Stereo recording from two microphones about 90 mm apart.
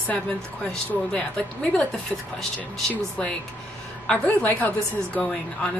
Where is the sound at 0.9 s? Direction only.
15° left (ahead or behind).